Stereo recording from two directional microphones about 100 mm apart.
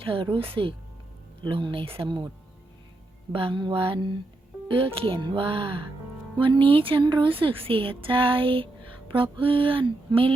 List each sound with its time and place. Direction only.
0.0 s speech: 65° right (ahead or behind)
3.3 s speech: 55° right (ahead or behind)
4.7 s speech: 65° right (ahead or behind)